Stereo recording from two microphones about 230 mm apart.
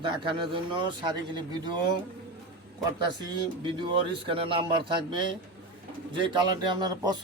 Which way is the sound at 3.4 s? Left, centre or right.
Right.